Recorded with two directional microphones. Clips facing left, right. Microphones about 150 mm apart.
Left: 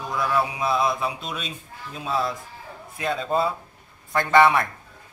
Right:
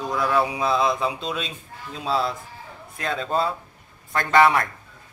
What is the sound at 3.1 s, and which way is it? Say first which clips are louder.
Speech: left 1 dB; 5° left (ahead or behind).